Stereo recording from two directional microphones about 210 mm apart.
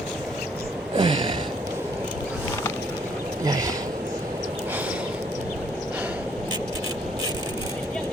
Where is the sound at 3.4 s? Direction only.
15° right (ahead or behind).